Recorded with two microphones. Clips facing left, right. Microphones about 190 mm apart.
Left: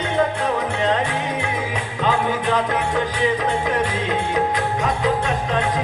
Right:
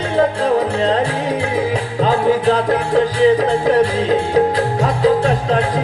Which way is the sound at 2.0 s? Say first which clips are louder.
Right 6 dB; 35° right (ahead or behind).